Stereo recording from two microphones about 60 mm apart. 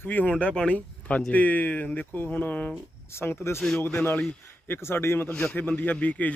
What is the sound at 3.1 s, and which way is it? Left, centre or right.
Speech, left.